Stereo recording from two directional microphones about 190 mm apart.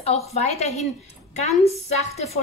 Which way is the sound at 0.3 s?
35° left (ahead or behind).